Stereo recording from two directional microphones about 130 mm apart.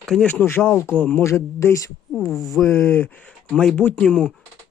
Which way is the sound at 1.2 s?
20° left (ahead or behind).